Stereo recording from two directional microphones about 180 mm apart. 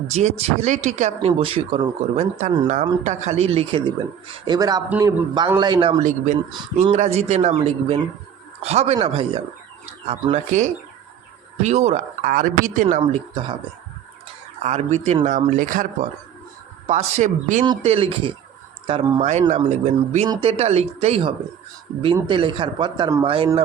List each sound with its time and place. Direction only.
0.1 s speech: 35° right (ahead or behind)
1.3 s speech: 30° right (ahead or behind)
4.4 s a man's voice: 20° right (ahead or behind)
4.9 s a man's voice: 10° right (ahead or behind)
6.0 s speech: 45° right (ahead or behind)
14.6 s speech: 40° right (ahead or behind)
17.8 s a man's voice: 30° right (ahead or behind)
19.2 s a man's voice: 40° right (ahead or behind)